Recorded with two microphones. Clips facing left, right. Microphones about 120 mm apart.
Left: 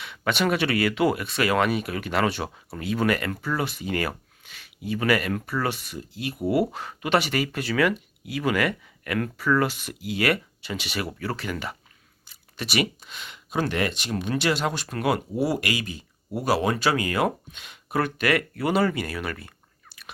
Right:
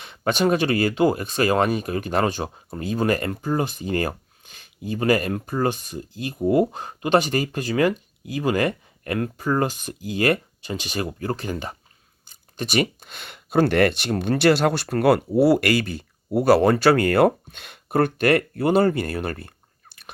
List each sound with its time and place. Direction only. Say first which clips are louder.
0.0 s speech: right 4 dB; 40° right (ahead or behind)